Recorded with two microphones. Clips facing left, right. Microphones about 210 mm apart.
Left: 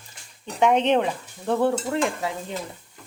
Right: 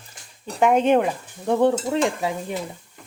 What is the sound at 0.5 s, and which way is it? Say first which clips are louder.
Stir: right 2 dB; 5° right (ahead or behind).